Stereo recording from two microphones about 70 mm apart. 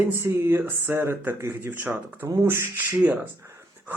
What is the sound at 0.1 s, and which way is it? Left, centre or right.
Speech, right.